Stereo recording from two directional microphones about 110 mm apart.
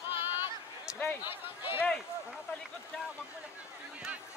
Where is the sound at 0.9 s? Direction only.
20° left (ahead or behind).